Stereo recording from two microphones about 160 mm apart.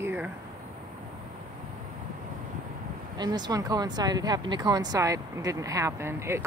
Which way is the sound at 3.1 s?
25° right (ahead or behind).